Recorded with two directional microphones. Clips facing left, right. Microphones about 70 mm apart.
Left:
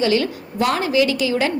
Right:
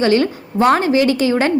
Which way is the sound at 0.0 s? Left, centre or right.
Right.